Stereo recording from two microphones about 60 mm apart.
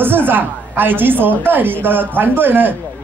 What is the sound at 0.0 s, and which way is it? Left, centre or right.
A man's voice, right.